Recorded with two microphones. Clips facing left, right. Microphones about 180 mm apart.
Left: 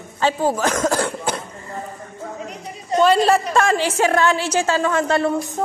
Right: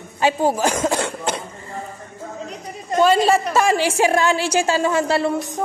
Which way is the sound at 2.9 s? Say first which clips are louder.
Even; centre (ahead or behind).